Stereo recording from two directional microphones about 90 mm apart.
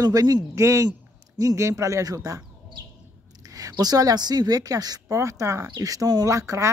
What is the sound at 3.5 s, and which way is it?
Speech, 45° right (ahead or behind).